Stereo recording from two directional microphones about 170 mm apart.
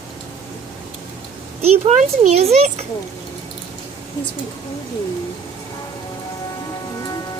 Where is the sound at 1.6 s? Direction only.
40° right (ahead or behind).